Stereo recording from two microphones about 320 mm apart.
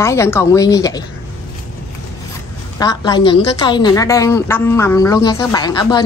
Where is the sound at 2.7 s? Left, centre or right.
Centre.